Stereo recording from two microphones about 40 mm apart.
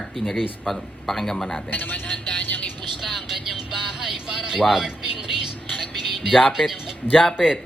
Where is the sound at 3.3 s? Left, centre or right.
Centre.